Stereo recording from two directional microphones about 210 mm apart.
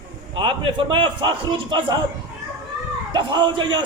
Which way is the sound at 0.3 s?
25° right (ahead or behind).